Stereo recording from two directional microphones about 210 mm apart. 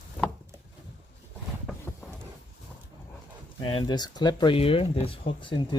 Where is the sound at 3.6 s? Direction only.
20° left (ahead or behind).